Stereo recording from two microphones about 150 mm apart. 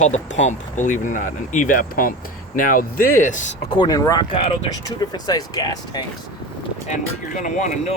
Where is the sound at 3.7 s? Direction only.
25° left (ahead or behind).